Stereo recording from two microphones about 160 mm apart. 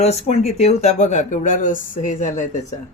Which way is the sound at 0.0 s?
40° left (ahead or behind).